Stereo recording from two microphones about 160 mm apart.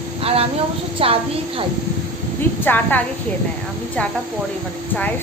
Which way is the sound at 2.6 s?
10° left (ahead or behind).